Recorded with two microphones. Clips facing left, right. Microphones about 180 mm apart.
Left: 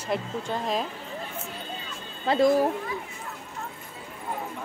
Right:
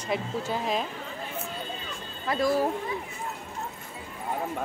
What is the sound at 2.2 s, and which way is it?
Speech, 25° left (ahead or behind).